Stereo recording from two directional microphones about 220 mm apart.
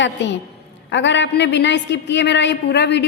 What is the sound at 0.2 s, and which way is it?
A woman's voice, 55° left (ahead or behind).